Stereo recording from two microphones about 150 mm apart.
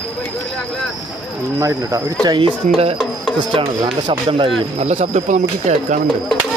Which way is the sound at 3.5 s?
40° right (ahead or behind).